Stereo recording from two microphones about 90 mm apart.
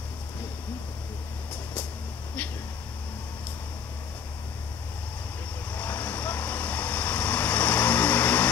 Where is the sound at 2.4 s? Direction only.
15° left (ahead or behind).